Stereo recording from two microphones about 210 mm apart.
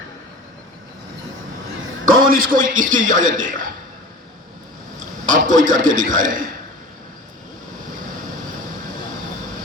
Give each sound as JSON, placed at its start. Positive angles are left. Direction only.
{"t": 2.0, "sound": "a man's voice", "side_deg": -45}
{"t": 4.9, "sound": "a man's voice", "side_deg": -40}